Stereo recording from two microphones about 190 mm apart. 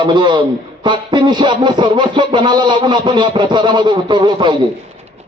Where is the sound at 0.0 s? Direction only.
25° right (ahead or behind).